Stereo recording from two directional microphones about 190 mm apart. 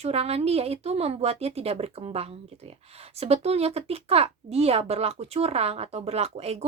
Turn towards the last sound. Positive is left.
turn(degrees=-35)  # may be behind; listen again after turning